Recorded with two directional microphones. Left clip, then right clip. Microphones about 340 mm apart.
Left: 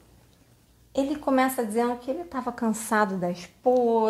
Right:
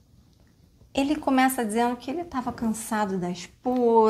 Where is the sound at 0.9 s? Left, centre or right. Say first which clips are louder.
Even; right.